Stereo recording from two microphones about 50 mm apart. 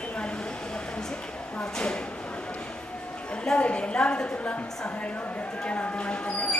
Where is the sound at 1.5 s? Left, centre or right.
Left.